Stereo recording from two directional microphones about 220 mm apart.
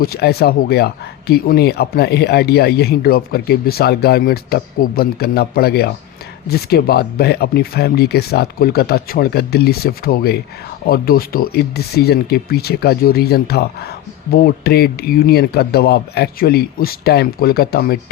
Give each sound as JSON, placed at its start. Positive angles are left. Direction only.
{"t": 0.0, "sound": "speech", "side_deg": 45}